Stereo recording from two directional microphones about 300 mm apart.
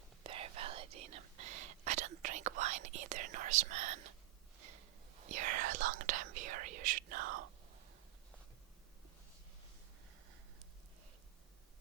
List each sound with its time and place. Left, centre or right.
0.2 s whispering: centre
5.3 s speech: right